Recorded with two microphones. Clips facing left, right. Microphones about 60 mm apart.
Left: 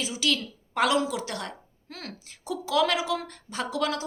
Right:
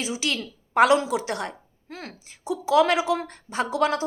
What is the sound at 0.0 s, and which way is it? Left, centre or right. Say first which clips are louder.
A woman's voice: even; right.